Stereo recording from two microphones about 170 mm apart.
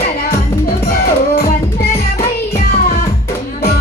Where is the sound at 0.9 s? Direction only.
65° left (ahead or behind).